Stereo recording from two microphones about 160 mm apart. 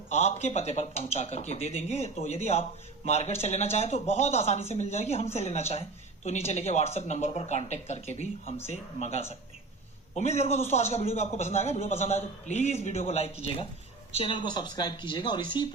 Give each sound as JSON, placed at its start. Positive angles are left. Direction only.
{"t": 0.1, "sound": "a woman's voice", "side_deg": 45}